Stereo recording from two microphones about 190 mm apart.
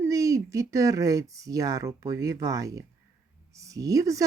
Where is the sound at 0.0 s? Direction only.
15° right (ahead or behind).